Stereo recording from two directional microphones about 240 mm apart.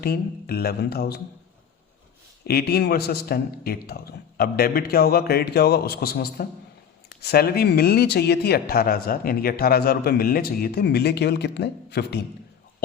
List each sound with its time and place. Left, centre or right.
0.0 s speech: left
2.5 s speech: left